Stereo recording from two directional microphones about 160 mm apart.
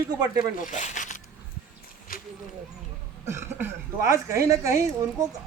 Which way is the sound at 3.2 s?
15° right (ahead or behind).